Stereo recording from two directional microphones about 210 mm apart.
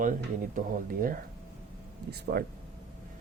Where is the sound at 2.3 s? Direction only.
45° right (ahead or behind).